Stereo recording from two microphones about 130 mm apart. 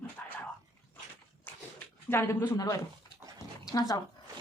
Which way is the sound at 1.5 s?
15° left (ahead or behind).